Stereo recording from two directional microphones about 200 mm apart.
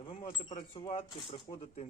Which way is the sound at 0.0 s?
25° left (ahead or behind).